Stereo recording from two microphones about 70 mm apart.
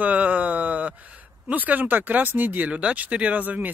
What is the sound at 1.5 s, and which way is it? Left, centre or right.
Speech, right.